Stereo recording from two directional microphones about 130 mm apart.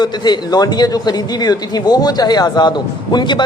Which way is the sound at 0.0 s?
35° left (ahead or behind).